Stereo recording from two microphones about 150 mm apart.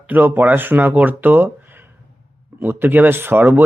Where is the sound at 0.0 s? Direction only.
10° right (ahead or behind).